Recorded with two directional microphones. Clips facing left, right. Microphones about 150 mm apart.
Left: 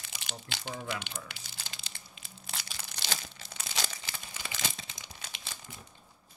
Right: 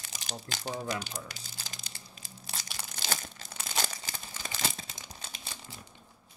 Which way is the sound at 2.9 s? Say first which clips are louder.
Right 2 dB; 45° right (ahead or behind).